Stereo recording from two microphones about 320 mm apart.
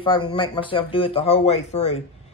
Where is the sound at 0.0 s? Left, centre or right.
Centre.